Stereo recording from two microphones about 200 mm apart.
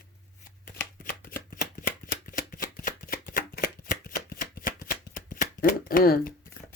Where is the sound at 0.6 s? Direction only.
45° left (ahead or behind).